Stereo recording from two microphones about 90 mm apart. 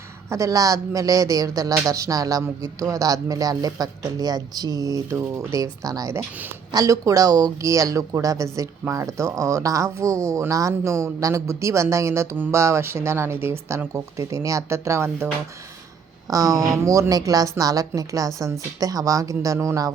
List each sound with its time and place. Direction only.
0.3 s speech: 35° right (ahead or behind)
16.3 s speech: 40° right (ahead or behind)